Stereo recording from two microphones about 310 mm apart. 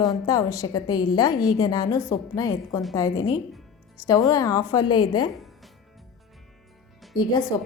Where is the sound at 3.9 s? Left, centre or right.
Centre.